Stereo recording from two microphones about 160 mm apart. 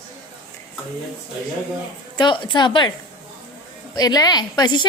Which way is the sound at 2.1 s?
30° left (ahead or behind).